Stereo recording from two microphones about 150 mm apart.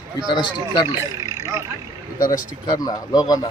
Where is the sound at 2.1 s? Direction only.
70° left (ahead or behind).